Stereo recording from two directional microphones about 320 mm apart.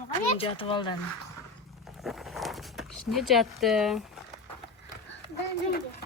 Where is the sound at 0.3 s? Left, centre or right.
Centre.